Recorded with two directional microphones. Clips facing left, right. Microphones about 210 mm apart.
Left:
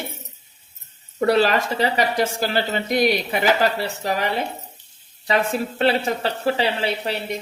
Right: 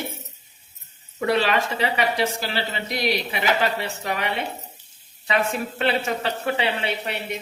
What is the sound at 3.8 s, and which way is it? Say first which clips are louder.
A woman's voice: left 4 dB; 35° left (ahead or behind).